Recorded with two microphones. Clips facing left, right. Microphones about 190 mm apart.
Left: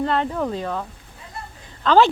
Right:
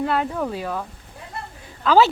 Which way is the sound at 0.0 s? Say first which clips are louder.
Left 1 dB; 5° right (ahead or behind).